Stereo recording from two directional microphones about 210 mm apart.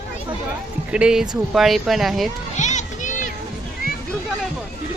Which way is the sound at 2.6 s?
35° left (ahead or behind).